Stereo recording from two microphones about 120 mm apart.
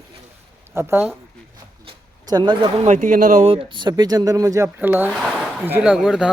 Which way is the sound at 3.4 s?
50° right (ahead or behind).